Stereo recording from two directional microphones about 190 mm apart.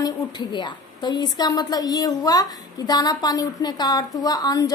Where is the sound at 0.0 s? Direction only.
20° left (ahead or behind).